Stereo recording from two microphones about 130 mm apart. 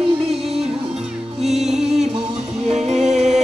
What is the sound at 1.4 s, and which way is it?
Music, 5° right (ahead or behind).